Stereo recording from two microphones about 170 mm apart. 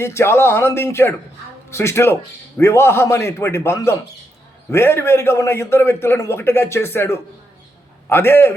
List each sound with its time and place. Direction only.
0.0 s a man's voice: 15° left (ahead or behind)